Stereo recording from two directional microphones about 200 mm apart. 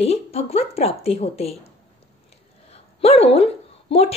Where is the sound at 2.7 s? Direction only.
30° left (ahead or behind).